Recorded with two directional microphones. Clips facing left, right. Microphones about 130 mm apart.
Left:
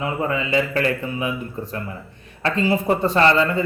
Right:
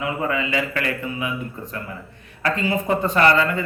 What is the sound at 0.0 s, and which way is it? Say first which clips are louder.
A man's voice: left 1 dB; 30° left (ahead or behind).